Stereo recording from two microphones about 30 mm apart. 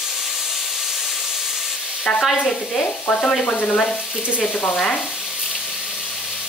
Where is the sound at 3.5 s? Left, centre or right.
Left.